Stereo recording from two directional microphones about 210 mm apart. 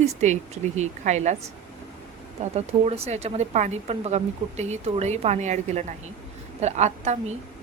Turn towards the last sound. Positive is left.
turn(degrees=-30)  # may be behind; listen again after turning